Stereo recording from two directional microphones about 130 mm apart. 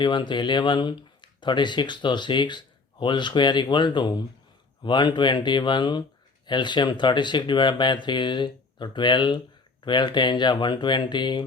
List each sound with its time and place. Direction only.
0.0 s speech: 35° left (ahead or behind)